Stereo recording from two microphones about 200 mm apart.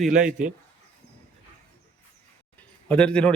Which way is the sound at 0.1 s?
40° right (ahead or behind).